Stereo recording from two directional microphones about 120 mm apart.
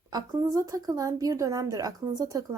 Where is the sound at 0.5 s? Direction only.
30° right (ahead or behind).